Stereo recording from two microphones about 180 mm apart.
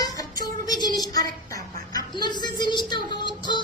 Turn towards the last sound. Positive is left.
turn(degrees=25)  # may be behind; listen again after turning